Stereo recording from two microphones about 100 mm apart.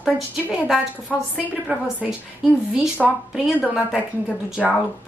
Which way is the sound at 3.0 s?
Centre (ahead or behind).